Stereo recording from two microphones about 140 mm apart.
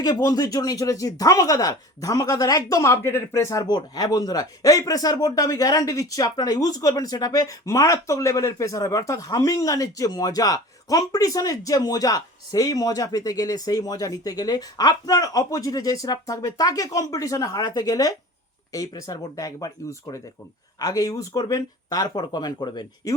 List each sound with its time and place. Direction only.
0.0 s speech: 25° left (ahead or behind)